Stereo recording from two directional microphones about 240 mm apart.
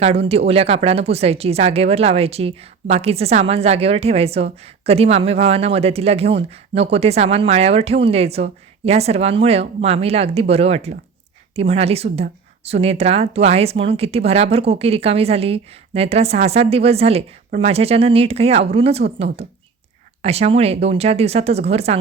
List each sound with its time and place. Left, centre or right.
0.0 s speech: right